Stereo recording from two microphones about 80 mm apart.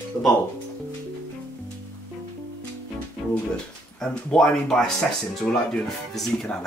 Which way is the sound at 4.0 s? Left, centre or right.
Centre.